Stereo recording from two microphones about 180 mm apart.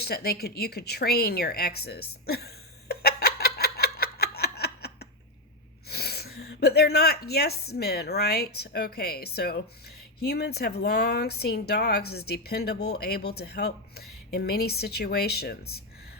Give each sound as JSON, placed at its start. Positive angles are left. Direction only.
{"t": 0.0, "sound": "speech", "side_deg": 60}
{"t": 2.9, "sound": "a sound", "side_deg": 60}
{"t": 5.9, "sound": "speech", "side_deg": 60}